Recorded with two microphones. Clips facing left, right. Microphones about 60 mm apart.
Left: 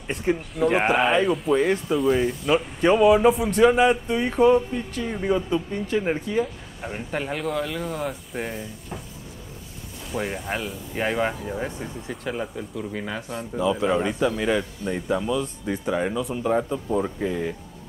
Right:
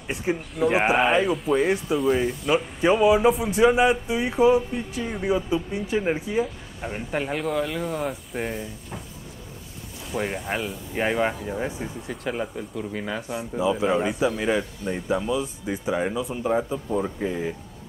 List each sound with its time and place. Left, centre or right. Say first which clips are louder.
0.1 s speech: left 2 dB; centre
10.1 s speech: right 1 dB; centre